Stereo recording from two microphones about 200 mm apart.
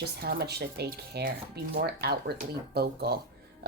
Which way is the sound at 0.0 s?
50° right (ahead or behind).